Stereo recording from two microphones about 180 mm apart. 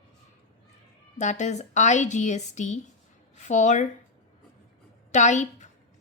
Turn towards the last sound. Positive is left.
turn(degrees=40)  # may be behind; listen again after turning